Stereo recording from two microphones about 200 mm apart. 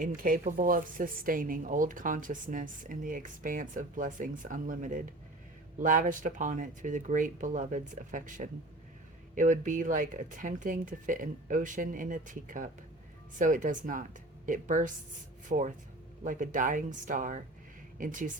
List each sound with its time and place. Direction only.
0.2 s speech: 45° right (ahead or behind)